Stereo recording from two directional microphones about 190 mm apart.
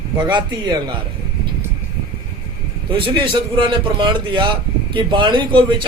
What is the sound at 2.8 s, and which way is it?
A man's voice, 25° right (ahead or behind).